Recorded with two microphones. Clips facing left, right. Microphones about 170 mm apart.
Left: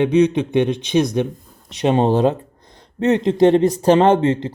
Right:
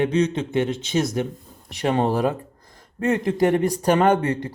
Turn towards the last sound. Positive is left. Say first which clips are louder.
# left 4 dB
turn(degrees=25)  # may be behind; listen again after turning